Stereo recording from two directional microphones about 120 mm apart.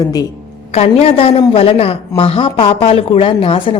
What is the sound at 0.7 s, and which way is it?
A woman's voice, 55° left (ahead or behind).